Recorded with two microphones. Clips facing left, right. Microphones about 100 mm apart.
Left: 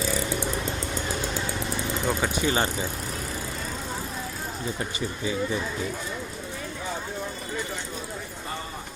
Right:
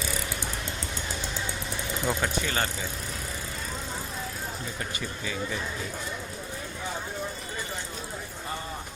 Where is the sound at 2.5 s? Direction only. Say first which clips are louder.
Left 5 dB; 20° left (ahead or behind).